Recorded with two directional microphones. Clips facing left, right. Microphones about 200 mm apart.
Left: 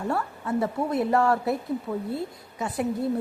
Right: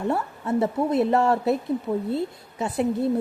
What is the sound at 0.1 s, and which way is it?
A woman's voice, 25° right (ahead or behind).